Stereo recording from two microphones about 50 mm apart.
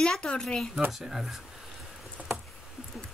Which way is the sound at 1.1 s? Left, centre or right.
Centre.